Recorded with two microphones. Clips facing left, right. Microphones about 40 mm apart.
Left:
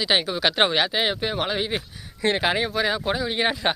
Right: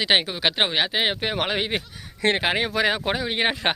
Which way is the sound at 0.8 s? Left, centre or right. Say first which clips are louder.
Even; right.